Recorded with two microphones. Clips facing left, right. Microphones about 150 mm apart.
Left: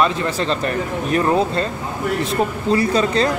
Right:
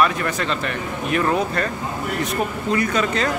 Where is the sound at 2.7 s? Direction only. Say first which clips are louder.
Left 4 dB; 30° left (ahead or behind).